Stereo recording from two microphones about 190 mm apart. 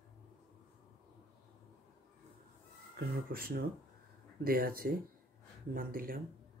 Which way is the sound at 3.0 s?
55° right (ahead or behind).